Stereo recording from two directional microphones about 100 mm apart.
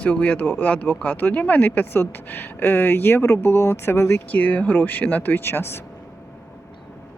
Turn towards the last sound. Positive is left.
turn(degrees=20)  # may be behind; listen again after turning